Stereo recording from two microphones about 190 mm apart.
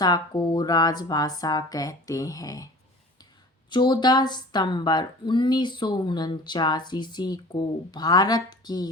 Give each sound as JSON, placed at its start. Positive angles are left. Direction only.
{"t": 0.0, "sound": "speech", "side_deg": 20}
{"t": 3.7, "sound": "speech", "side_deg": 25}